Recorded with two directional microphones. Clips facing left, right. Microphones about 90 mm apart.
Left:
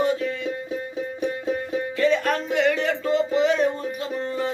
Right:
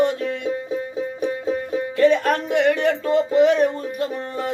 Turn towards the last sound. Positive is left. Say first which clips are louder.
# right 1 dB
turn(degrees=-55)  # may be behind; listen again after turning